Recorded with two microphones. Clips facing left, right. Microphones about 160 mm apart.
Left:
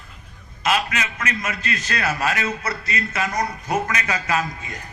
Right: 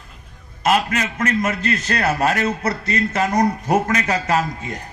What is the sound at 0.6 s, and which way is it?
A man's voice, 45° right (ahead or behind).